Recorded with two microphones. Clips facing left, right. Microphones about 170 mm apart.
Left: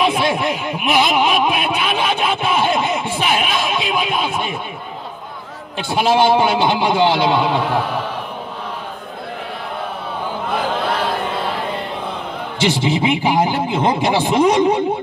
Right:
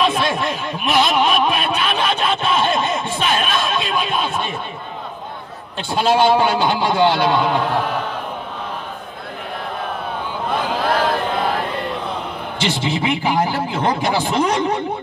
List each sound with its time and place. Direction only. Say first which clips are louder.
0.0 s snicker: left 2 dB; 15° left (ahead or behind)
5.9 s speech: left 1 dB; 15° left (ahead or behind)
12.6 s speech: left 4 dB; 15° left (ahead or behind)